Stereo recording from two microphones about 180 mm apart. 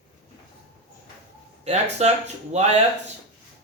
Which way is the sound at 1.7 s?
40° right (ahead or behind).